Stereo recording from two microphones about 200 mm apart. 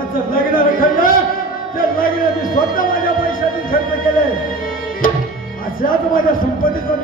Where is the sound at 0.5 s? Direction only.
45° left (ahead or behind).